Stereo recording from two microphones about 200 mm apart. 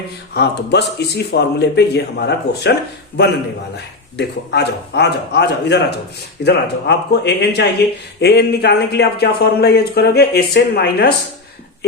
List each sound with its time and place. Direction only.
0.3 s speech: 55° left (ahead or behind)
3.8 s a man's voice: 55° left (ahead or behind)